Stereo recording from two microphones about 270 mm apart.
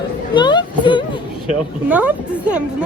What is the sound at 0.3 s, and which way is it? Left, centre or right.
Speech, centre.